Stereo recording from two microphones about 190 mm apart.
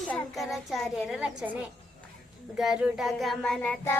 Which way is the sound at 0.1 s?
Centre (ahead or behind).